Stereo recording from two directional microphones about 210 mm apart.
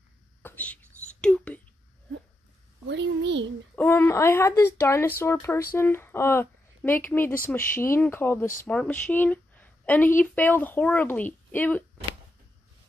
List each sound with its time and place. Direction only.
0.4 s whispering: 10° left (ahead or behind)
1.2 s speech: 5° left (ahead or behind)
2.9 s a child's voice: 55° right (ahead or behind)
3.7 s speech: 10° left (ahead or behind)